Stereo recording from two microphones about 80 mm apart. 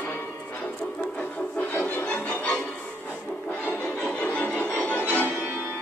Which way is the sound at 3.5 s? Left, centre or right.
Left.